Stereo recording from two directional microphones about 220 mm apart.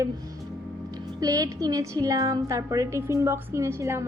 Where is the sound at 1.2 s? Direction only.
15° right (ahead or behind).